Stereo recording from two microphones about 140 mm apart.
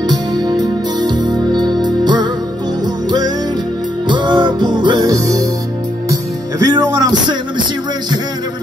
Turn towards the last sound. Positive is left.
turn(degrees=-30)  # may be behind; listen again after turning